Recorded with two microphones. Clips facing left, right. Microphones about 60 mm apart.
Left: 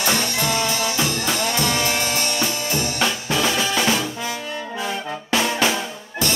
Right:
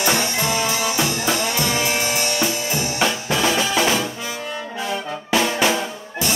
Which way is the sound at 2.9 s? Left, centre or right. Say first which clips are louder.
Right 3 dB; centre.